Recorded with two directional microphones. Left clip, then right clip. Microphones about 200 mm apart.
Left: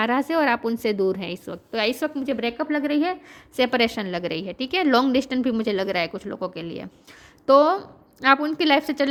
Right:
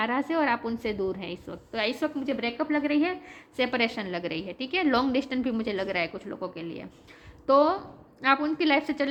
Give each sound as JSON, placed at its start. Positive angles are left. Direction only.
{"t": 0.0, "sound": "a woman's voice", "side_deg": 45}